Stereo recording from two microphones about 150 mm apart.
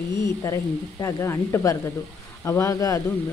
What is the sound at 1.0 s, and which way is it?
Speech, 20° left (ahead or behind).